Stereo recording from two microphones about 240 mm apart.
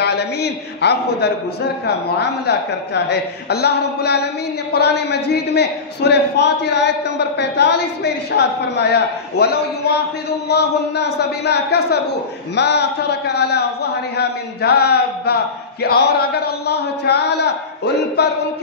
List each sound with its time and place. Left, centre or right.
0.0 s a man's voice: left